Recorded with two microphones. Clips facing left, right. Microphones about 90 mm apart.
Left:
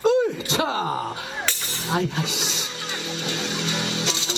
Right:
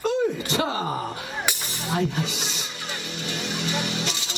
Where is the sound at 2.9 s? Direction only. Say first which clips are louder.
Left 3 dB; 20° left (ahead or behind).